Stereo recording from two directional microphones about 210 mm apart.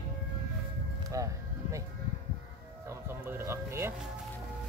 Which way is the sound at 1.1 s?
15° right (ahead or behind).